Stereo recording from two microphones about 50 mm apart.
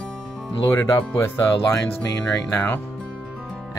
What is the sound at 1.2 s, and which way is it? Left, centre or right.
Speech, left.